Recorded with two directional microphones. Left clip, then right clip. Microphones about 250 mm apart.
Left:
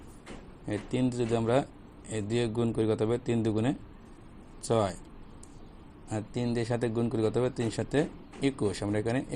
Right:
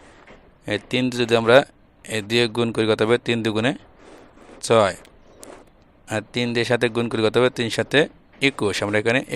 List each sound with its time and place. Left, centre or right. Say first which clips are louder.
0.6 s a man's voice: right 9 dB; right
6.1 s a man's voice: right 9 dB; right